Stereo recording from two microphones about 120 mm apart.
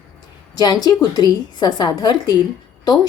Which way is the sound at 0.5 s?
35° left (ahead or behind).